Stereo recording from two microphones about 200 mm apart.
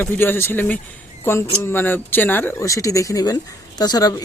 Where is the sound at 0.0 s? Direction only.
10° left (ahead or behind).